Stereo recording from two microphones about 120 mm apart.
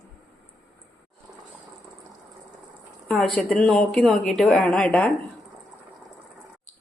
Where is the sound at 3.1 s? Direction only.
Centre (ahead or behind).